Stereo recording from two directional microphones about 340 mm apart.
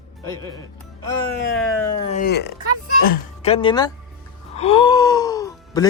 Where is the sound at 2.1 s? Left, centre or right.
Left.